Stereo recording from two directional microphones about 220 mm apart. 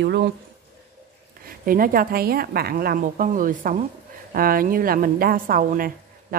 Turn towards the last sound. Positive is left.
turn(degrees=-40)  # may be behind; listen again after turning